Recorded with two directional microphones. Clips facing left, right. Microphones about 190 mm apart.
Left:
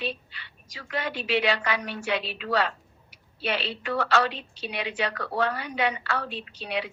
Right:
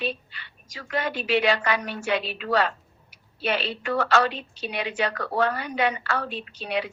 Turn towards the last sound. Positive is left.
turn(degrees=-45)  # may be behind; listen again after turning